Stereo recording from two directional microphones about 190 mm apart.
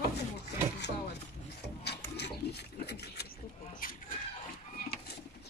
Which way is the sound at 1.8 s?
60° left (ahead or behind).